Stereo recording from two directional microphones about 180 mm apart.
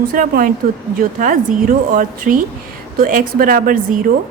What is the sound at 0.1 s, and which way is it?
A woman's voice, 50° right (ahead or behind).